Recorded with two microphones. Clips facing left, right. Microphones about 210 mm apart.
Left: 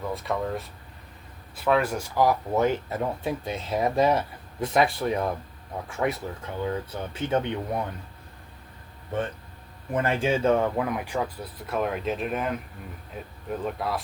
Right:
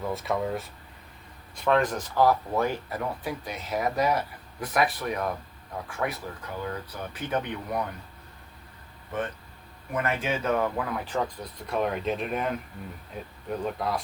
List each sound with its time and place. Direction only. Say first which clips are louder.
0.1 s speech: even; centre (ahead or behind); by 7.8 s 25° left (ahead or behind)
9.9 s speech: left 4 dB; 30° left (ahead or behind); by 11.2 s 15° left (ahead or behind)
11.6 s speech: even; centre (ahead or behind)